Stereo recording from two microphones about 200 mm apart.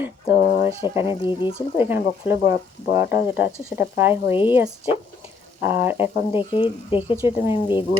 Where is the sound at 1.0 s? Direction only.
25° left (ahead or behind).